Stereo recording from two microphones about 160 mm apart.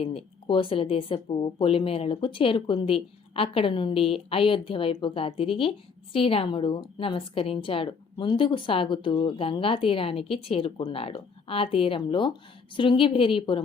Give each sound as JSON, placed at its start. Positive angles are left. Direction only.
{"t": 0.0, "sound": "a woman's voice", "side_deg": 35}